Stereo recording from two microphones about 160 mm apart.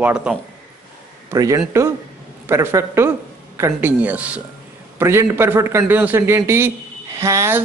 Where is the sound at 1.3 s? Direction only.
20° right (ahead or behind).